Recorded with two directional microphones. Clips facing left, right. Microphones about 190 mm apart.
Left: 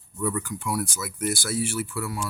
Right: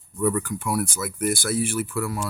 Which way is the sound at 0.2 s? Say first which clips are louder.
Right 5 dB; 55° right (ahead or behind).